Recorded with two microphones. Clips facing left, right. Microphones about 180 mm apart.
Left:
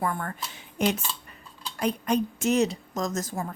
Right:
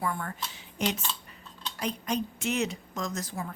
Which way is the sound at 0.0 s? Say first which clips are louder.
Left 3 dB; 50° left (ahead or behind).